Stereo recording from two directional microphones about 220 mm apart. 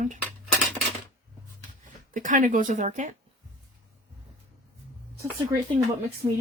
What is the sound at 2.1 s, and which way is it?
Speech, 35° right (ahead or behind).